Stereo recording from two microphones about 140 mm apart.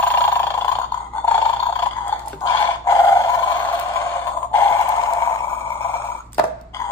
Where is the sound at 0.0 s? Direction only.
15° left (ahead or behind).